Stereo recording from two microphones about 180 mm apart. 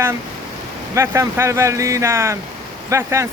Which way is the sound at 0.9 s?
15° right (ahead or behind).